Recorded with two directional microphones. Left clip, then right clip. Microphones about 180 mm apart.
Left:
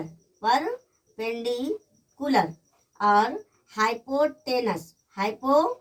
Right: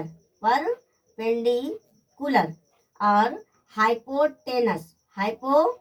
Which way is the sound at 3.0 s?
20° left (ahead or behind).